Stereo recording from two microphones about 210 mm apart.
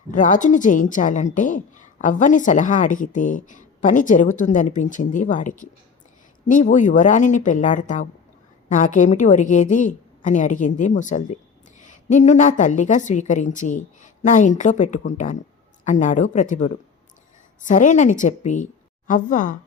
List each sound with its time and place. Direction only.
0.1 s a woman's voice: 35° left (ahead or behind)